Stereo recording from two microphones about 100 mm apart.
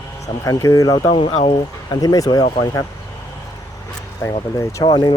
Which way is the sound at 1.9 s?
35° left (ahead or behind).